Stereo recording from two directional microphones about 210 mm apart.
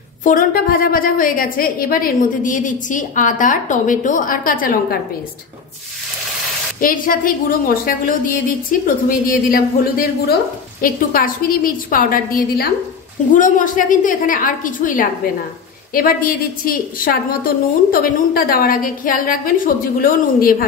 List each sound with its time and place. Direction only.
0.2 s a woman's voice: 40° left (ahead or behind)
6.8 s a woman's voice: 40° left (ahead or behind)